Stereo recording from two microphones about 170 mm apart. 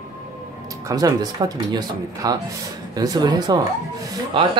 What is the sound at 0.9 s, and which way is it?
Speech, 20° right (ahead or behind).